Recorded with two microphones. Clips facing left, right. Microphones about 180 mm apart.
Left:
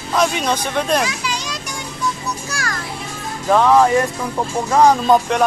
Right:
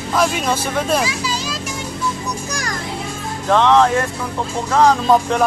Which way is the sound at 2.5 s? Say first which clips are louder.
Right 1 dB; 15° right (ahead or behind).